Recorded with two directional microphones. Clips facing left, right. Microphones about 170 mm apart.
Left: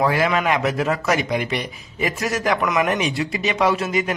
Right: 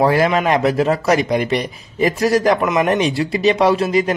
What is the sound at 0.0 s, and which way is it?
Speech, 35° right (ahead or behind).